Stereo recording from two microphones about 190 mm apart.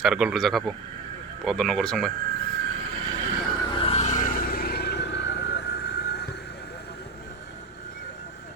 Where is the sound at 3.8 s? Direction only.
35° left (ahead or behind); by 7.0 s 60° left (ahead or behind).